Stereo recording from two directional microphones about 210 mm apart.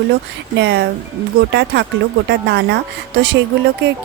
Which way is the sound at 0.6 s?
55° right (ahead or behind).